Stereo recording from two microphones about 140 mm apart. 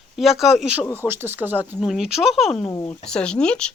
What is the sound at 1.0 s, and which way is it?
Speech, 15° right (ahead or behind).